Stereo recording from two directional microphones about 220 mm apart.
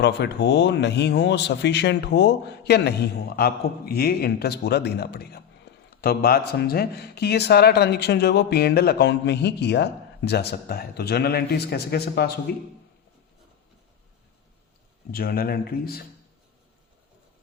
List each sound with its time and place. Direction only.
0.0 s speech: 50° left (ahead or behind)
5.7 s a sound: 50° left (ahead or behind)
6.0 s speech: 45° left (ahead or behind)
15.1 s speech: 45° left (ahead or behind)